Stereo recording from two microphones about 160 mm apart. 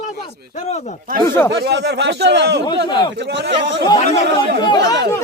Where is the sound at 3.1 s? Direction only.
90° right.